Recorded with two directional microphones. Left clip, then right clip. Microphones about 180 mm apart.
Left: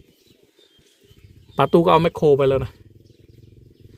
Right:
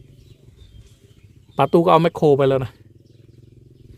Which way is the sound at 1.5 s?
5° right (ahead or behind).